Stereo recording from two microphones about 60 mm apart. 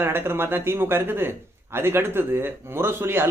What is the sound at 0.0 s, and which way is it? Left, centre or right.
A man's voice, right.